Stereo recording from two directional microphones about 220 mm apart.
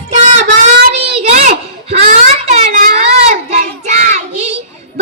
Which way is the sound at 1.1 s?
30° right (ahead or behind).